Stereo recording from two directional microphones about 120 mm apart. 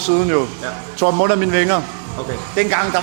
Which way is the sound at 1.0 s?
20° right (ahead or behind).